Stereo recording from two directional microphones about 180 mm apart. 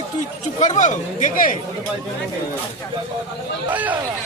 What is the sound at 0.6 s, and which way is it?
Chatter, 45° left (ahead or behind).